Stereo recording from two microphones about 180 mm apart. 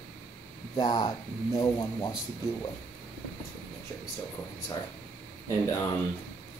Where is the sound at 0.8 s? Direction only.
25° left (ahead or behind).